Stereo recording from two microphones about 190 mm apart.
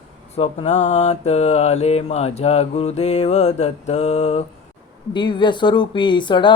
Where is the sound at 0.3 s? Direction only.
30° left (ahead or behind).